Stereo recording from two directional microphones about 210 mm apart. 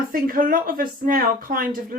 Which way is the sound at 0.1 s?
40° right (ahead or behind).